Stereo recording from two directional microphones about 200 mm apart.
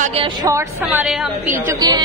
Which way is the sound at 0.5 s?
10° right (ahead or behind).